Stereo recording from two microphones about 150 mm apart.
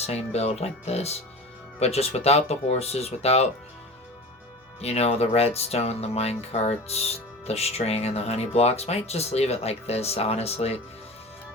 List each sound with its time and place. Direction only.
0.0 s speech: 45° left (ahead or behind)
4.8 s speech: 45° left (ahead or behind)